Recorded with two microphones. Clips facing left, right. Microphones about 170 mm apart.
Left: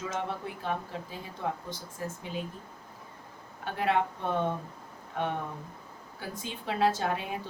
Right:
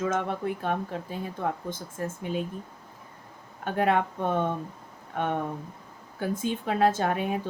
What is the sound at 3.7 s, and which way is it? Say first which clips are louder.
Speech: right 4 dB; 50° right (ahead or behind).